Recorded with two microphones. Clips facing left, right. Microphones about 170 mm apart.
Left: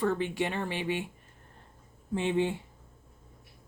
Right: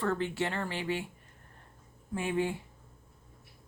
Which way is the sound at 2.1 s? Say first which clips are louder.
Left 3 dB; 25° left (ahead or behind).